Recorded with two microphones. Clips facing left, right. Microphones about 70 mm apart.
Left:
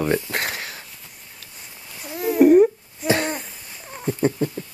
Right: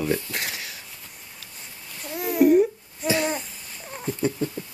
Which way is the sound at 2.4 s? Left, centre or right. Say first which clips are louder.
Left 4 dB; left.